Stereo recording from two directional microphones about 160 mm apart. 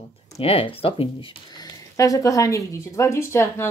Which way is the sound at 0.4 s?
35° left (ahead or behind).